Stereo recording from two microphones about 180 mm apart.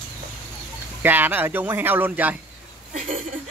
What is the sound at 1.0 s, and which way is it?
Speech, 10° right (ahead or behind).